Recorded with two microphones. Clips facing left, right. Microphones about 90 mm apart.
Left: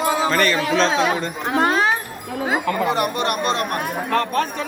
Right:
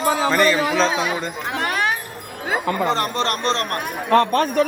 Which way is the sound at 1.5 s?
25° left (ahead or behind).